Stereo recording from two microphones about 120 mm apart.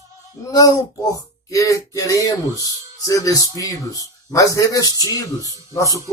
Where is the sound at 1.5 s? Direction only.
30° left (ahead or behind).